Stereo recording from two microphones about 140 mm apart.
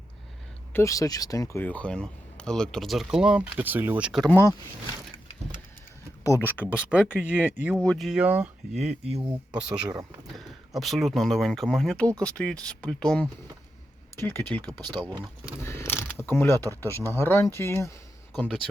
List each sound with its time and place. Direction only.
0.7 s speech: 20° left (ahead or behind)
1.6 s speech: 10° left (ahead or behind); by 4.2 s 10° right (ahead or behind)
4.2 s speech: 15° left (ahead or behind)
6.4 s speech: 10° right (ahead or behind)
7.8 s speech: 5° left (ahead or behind)
8.2 s speech: 10° right (ahead or behind)
8.7 s speech: 55° right (ahead or behind)
9.5 s speech: 5° right (ahead or behind); by 14.7 s 10° left (ahead or behind)
15.0 s speech: 10° right (ahead or behind)
15.6 s mechanisms: 20° left (ahead or behind)
17.2 s speech: 15° left (ahead or behind)
18.3 s speech: centre (ahead or behind)